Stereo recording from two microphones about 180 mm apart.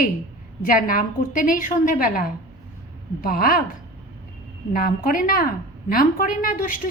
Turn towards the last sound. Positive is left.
turn(degrees=50)  # may be behind; listen again after turning